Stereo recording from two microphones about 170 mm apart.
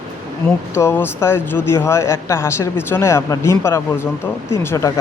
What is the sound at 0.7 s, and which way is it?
Speech, 15° left (ahead or behind).